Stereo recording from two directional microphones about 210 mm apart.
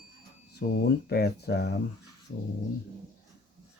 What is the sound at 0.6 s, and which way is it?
Speech, 50° left (ahead or behind).